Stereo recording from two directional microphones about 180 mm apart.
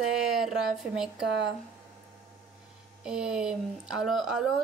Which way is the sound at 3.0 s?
5° right (ahead or behind).